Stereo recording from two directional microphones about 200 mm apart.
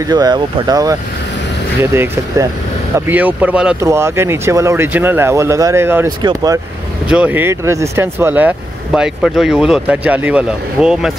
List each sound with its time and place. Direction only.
0.0 s speech: 20° right (ahead or behind)
7.1 s speech: 5° right (ahead or behind)